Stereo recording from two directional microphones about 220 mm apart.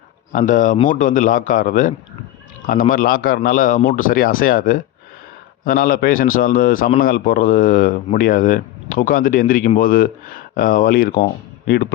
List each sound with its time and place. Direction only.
0.3 s speech: 35° left (ahead or behind)